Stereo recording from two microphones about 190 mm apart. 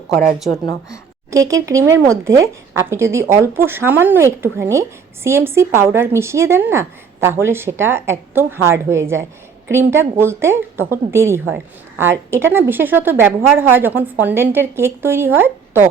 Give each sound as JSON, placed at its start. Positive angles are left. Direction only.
{"t": 0.3, "sound": "a woman's voice", "side_deg": 0}
{"t": 1.3, "sound": "a woman's voice", "side_deg": -15}